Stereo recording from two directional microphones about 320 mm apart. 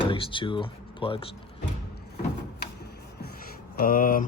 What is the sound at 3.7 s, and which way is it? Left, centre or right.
Speech, left.